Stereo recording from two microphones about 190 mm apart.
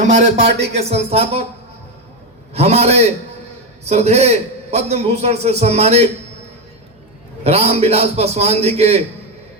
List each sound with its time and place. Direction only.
0.1 s a man's voice: 40° right (ahead or behind)
2.5 s a man's voice: 35° right (ahead or behind)
7.4 s a man's voice: 35° right (ahead or behind)